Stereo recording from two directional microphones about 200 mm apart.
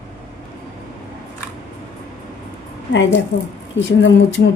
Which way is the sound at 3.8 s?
65° left (ahead or behind).